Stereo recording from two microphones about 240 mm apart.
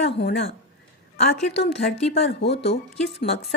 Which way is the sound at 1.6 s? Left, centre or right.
Left.